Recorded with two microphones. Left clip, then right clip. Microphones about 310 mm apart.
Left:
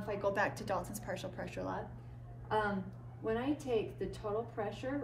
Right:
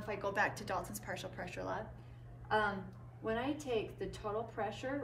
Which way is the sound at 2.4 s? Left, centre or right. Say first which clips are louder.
Right 1 dB; centre.